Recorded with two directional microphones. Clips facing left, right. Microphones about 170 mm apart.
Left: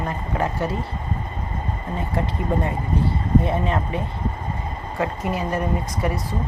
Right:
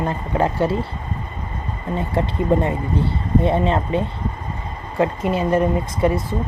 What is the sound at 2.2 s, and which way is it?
Speech, 30° right (ahead or behind).